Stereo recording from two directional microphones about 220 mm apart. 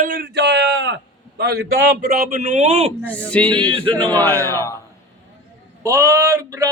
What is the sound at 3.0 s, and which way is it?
Speech, 5° left (ahead or behind).